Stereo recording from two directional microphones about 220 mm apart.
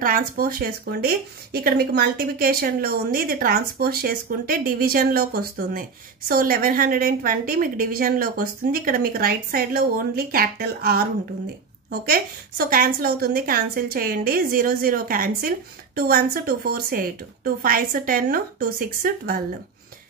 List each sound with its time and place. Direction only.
0.0 s speech: 40° right (ahead or behind)
12.1 s speech: 40° right (ahead or behind)